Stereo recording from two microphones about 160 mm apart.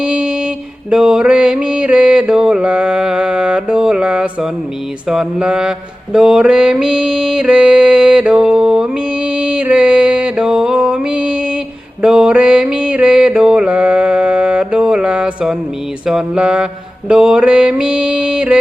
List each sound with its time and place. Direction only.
0.0 s mantra: 5° right (ahead or behind)
5.0 s music: 5° right (ahead or behind)
6.1 s mantra: 5° right (ahead or behind)
16.0 s music: 5° right (ahead or behind)